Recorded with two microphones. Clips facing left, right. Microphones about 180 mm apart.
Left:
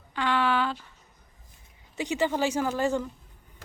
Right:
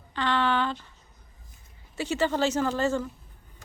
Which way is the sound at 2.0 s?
15° left (ahead or behind).